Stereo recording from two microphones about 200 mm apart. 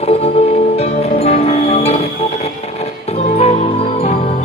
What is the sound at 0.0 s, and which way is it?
Music, 30° left (ahead or behind).